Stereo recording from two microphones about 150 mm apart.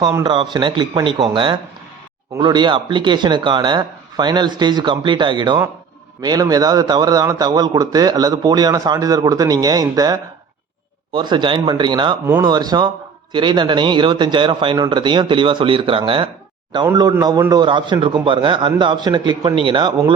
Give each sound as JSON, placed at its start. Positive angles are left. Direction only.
{"t": 0.3, "sound": "a man's voice", "side_deg": -30}
{"t": 12.2, "sound": "speech", "side_deg": -15}
{"t": 12.5, "sound": "a man's voice", "side_deg": -25}